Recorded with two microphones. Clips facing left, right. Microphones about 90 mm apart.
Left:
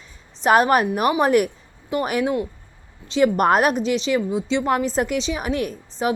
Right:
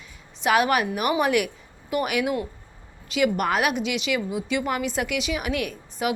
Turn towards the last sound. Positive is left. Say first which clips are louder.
# left 3 dB
turn(degrees=35)  # may be behind; listen again after turning